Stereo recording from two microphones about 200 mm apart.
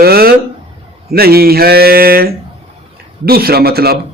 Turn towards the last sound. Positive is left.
turn(degrees=-50)  # may be behind; listen again after turning